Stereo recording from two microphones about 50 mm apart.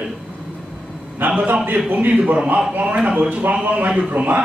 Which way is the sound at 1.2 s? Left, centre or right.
Right.